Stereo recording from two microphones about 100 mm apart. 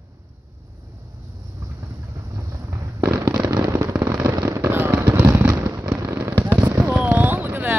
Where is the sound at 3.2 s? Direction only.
40° right (ahead or behind).